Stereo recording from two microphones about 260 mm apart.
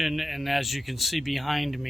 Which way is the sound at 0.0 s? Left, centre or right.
Centre.